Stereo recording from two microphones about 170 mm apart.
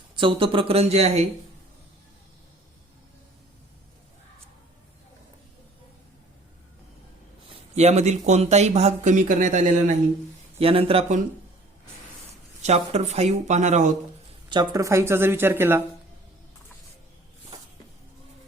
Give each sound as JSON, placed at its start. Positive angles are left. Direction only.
{"t": 0.2, "sound": "speech", "side_deg": -30}
{"t": 7.8, "sound": "speech", "side_deg": -40}
{"t": 10.6, "sound": "speech", "side_deg": -35}
{"t": 12.6, "sound": "speech", "side_deg": -40}
{"t": 14.5, "sound": "speech", "side_deg": -20}